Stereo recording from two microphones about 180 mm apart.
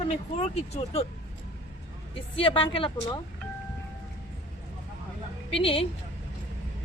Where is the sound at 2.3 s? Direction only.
30° left (ahead or behind).